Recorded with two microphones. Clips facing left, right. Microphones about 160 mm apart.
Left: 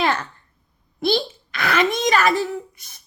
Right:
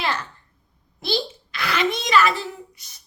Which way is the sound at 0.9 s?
50° left (ahead or behind).